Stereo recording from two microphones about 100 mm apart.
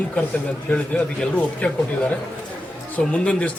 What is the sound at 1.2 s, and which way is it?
Speech, 10° left (ahead or behind).